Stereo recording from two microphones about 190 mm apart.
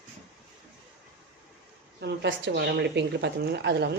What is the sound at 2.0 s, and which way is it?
A woman's voice, 65° right (ahead or behind).